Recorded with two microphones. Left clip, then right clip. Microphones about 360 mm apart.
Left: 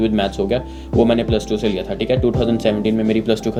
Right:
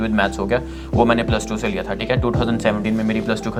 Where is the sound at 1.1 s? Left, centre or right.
Right.